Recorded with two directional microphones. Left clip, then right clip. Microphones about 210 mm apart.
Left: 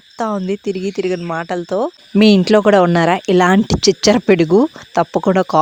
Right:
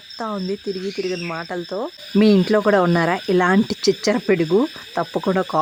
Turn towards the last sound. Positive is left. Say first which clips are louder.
# left 6 dB
turn(degrees=35)  # may be behind; listen again after turning